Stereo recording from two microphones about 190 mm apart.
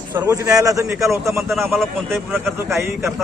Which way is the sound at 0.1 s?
10° right (ahead or behind).